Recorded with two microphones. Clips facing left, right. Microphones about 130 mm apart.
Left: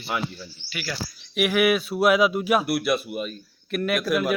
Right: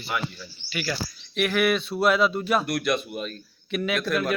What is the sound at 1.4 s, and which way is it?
A man's voice, 5° left (ahead or behind).